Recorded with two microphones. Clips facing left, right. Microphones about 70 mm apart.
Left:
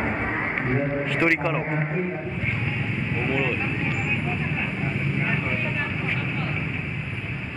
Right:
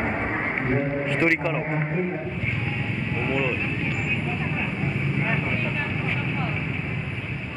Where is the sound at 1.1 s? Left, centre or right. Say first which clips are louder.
Even; centre.